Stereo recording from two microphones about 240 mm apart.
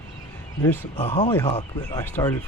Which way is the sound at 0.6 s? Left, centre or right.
Centre.